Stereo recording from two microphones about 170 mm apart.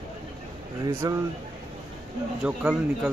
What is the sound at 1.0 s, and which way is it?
Speech, 20° right (ahead or behind).